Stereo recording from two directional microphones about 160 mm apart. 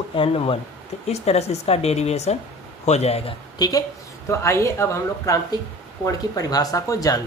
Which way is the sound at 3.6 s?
25° left (ahead or behind).